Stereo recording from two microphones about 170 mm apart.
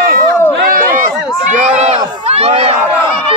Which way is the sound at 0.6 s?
55° right (ahead or behind).